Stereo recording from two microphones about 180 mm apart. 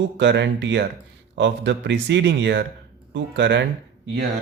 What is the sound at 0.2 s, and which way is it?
A man's voice, 75° right (ahead or behind).